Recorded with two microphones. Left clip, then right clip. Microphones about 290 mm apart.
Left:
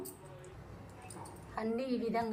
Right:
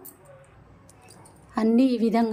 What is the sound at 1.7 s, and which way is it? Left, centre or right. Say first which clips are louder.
Speech: right 15 dB; right.